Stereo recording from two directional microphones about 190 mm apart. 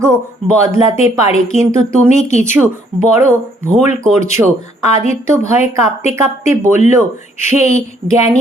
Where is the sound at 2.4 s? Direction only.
10° right (ahead or behind).